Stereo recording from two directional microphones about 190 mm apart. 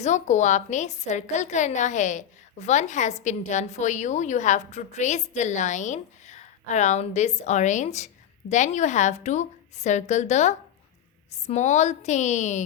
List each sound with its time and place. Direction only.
0.0 s a woman's voice: 40° left (ahead or behind)